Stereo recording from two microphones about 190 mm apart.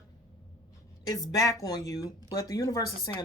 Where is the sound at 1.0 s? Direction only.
20° left (ahead or behind).